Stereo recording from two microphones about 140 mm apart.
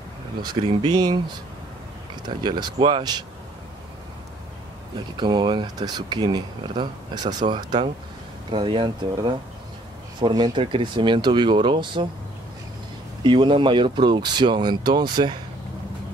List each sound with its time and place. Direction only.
0.8 s speech: 30° right (ahead or behind)
2.2 s speech: 30° right (ahead or behind)
5.1 s speech: 35° right (ahead or behind)
13.2 s speech: 35° right (ahead or behind)